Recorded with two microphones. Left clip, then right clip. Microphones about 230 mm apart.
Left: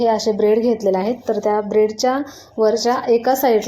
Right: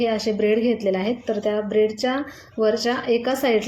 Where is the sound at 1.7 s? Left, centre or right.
Left.